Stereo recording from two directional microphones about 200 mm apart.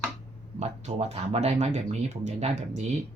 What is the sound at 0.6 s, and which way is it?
Speech, 35° right (ahead or behind).